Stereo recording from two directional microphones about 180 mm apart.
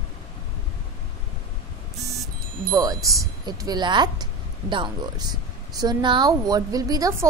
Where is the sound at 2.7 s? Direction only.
20° right (ahead or behind).